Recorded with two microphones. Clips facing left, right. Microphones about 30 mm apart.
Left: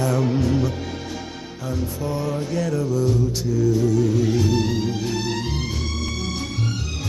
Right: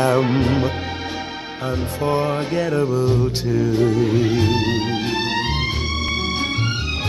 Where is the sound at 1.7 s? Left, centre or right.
Right.